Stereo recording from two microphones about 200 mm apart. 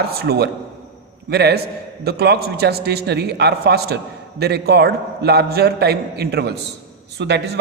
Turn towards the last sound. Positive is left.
turn(degrees=-55)  # may be behind; listen again after turning